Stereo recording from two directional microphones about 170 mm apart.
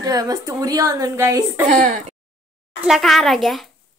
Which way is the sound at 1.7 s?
45° right (ahead or behind).